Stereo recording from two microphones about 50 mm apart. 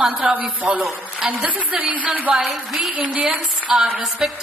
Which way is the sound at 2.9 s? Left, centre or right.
Right.